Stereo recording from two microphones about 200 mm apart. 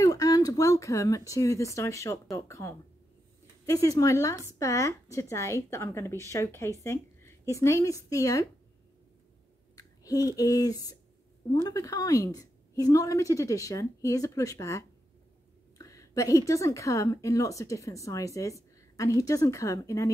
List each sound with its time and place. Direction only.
0.0 s a woman's voice: 20° left (ahead or behind)
9.8 s a woman's voice: 15° left (ahead or behind)